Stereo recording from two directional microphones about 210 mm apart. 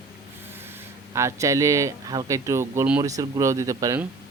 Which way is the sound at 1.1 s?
15° right (ahead or behind).